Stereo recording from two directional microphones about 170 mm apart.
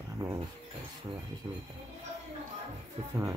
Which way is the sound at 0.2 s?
20° right (ahead or behind).